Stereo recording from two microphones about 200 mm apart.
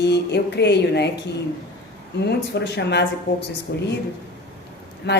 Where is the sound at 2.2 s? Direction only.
55° left (ahead or behind).